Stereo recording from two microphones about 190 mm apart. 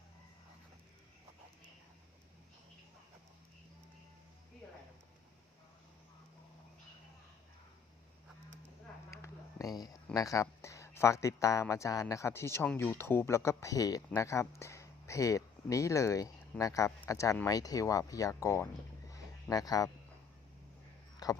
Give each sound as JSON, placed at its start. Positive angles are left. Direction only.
{"t": 9.0, "sound": "run", "side_deg": 15}
{"t": 10.2, "sound": "speech", "side_deg": 15}
{"t": 19.1, "sound": "a sound", "side_deg": 20}
{"t": 21.2, "sound": "speech", "side_deg": 20}